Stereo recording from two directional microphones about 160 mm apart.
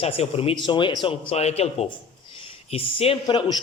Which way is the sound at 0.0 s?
40° left (ahead or behind).